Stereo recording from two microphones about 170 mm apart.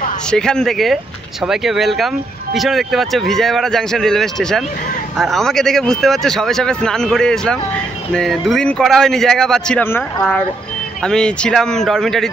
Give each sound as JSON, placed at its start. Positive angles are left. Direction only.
{"t": 0.3, "sound": "speech", "side_deg": 5}